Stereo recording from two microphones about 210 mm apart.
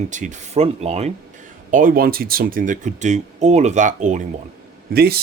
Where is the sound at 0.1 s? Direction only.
35° right (ahead or behind).